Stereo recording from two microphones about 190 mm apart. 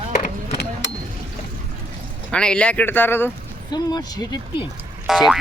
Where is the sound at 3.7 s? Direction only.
20° left (ahead or behind).